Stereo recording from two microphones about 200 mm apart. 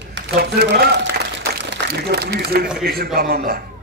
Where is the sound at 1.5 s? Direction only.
55° right (ahead or behind).